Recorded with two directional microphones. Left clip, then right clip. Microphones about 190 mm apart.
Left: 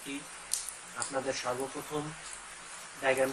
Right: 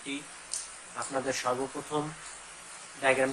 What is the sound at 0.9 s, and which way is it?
Speech, 20° right (ahead or behind).